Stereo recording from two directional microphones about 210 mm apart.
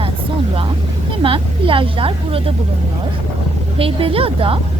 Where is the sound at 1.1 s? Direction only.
25° right (ahead or behind).